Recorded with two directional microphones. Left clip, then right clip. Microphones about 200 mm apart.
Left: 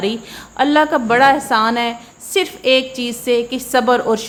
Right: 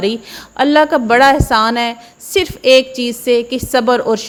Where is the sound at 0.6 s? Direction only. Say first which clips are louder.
Right 3 dB; 25° right (ahead or behind).